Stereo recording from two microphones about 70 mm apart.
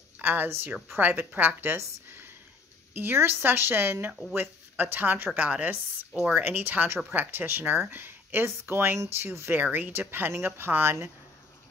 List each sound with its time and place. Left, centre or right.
0.2 s speech: right
1.8 s a sound: right
2.9 s speech: right
4.1 s speech: centre
4.4 s speech: right
9.6 s speech: right